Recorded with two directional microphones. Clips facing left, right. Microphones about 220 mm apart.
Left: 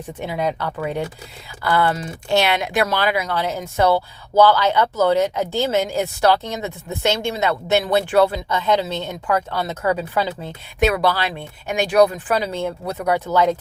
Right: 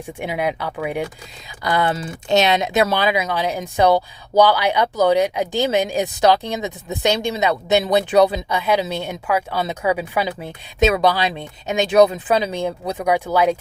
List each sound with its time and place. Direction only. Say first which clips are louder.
0.1 s speech: even; 10° right (ahead or behind)